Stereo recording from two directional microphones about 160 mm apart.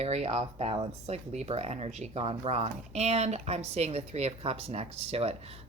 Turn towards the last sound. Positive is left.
turn(degrees=-40)  # may be behind; listen again after turning